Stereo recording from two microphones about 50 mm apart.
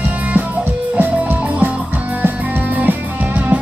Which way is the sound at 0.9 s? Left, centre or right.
Right.